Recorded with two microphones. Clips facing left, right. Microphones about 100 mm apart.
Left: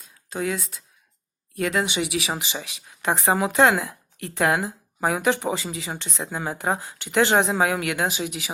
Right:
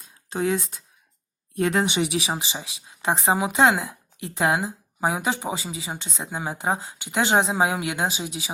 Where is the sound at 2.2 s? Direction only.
20° right (ahead or behind).